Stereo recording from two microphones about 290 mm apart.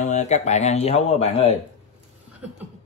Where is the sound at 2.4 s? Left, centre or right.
Centre.